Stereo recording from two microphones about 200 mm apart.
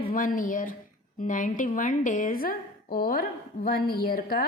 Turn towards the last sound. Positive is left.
turn(degrees=45)  # may be behind; listen again after turning